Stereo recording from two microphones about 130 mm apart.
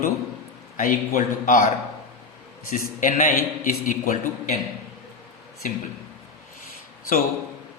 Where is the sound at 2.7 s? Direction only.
90° left; by 4.5 s 70° left (ahead or behind).